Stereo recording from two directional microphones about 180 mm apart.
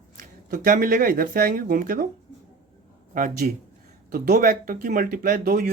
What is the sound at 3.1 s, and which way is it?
Speech, 50° right (ahead or behind).